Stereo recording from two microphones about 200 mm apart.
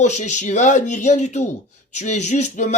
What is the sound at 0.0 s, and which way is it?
Speech, 35° left (ahead or behind).